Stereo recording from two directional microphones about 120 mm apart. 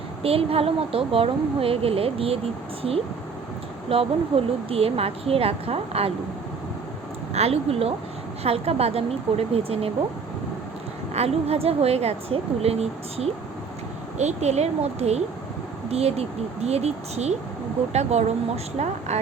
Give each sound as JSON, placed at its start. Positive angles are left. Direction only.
{"t": 0.2, "sound": "a woman's voice", "side_deg": -55}
{"t": 3.9, "sound": "a woman's voice", "side_deg": -50}
{"t": 7.3, "sound": "a woman's voice", "side_deg": -60}
{"t": 11.1, "sound": "a woman's voice", "side_deg": -60}